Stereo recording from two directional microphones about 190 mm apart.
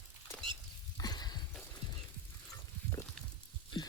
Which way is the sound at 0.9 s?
20° left (ahead or behind).